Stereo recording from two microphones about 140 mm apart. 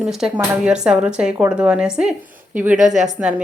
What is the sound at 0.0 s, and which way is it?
A woman's voice, 5° right (ahead or behind).